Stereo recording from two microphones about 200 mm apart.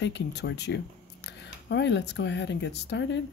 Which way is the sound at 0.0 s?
60° left (ahead or behind).